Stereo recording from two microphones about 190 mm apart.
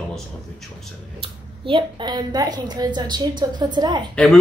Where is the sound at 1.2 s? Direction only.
25° right (ahead or behind).